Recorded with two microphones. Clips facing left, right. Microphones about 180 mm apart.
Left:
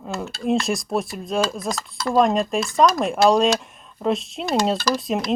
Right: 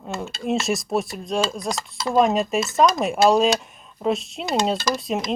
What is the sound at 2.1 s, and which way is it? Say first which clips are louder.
Speech: even; centre (ahead or behind).